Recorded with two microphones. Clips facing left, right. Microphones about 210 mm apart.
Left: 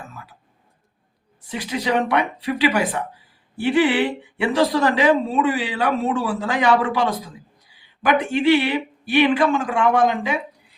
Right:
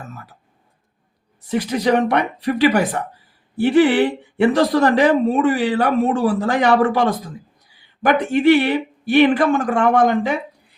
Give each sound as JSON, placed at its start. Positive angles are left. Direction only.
{"t": 1.5, "sound": "speech", "side_deg": -50}